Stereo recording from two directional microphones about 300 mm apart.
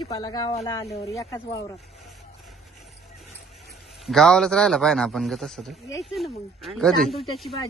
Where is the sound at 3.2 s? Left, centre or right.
Centre.